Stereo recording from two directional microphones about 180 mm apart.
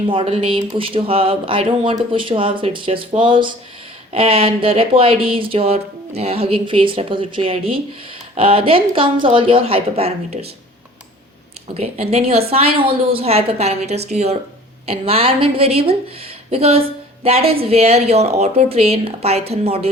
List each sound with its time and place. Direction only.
0.1 s speech: 30° right (ahead or behind)
11.7 s speech: 35° right (ahead or behind)